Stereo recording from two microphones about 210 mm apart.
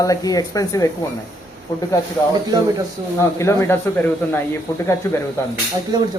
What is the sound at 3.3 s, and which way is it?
Speech, 15° left (ahead or behind).